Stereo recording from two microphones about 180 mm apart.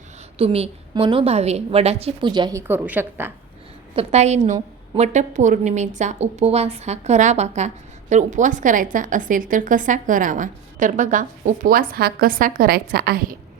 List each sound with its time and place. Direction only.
0.3 s a woman's voice: 35° right (ahead or behind); by 3.3 s 10° right (ahead or behind)
3.9 s a woman's voice: 40° right (ahead or behind); by 13.3 s 60° right (ahead or behind)